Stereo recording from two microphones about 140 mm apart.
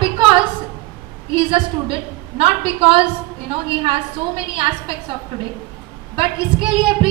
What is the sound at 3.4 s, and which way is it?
Speech, 35° right (ahead or behind).